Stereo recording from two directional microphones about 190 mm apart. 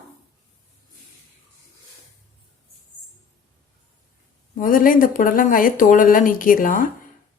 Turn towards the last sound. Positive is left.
turn(degrees=45)  # may be behind; listen again after turning